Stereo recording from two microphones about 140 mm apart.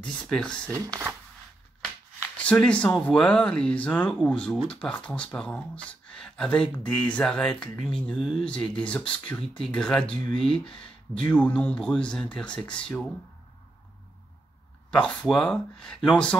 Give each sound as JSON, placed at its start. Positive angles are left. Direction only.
{"t": 0.0, "sound": "speech", "side_deg": 5}
{"t": 0.7, "sound": "speech", "side_deg": -20}
{"t": 2.3, "sound": "speech", "side_deg": 5}
{"t": 14.9, "sound": "speech", "side_deg": 5}